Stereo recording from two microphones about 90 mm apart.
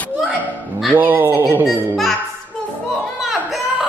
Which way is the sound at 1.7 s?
5° left (ahead or behind).